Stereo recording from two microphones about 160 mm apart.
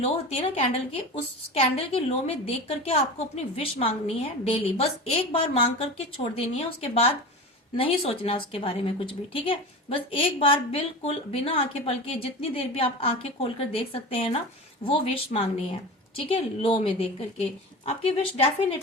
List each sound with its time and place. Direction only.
0.0 s a woman's voice: 40° left (ahead or behind)